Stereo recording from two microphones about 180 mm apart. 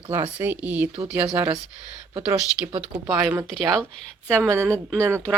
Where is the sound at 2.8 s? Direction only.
5° right (ahead or behind).